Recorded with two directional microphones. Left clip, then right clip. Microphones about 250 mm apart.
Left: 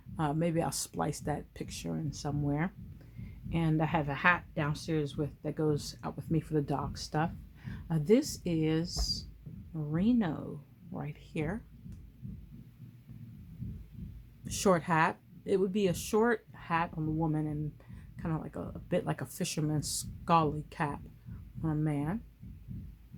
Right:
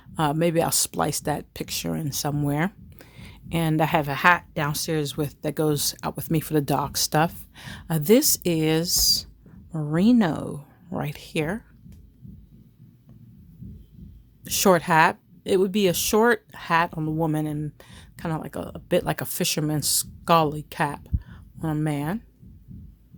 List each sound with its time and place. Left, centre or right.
0.2 s speech: right
14.4 s speech: right